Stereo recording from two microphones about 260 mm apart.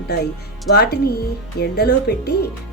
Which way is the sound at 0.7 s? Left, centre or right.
Left.